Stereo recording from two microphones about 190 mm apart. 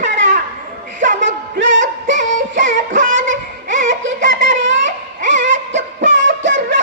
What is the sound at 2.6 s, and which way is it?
Music, 40° right (ahead or behind).